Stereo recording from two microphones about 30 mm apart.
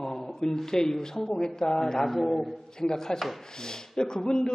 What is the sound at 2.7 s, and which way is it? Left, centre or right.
A man's voice, left.